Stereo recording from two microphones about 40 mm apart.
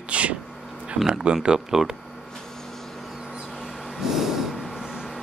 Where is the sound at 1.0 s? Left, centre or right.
Centre.